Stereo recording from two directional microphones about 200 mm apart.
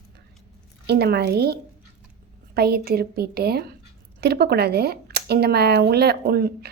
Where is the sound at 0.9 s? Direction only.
55° right (ahead or behind).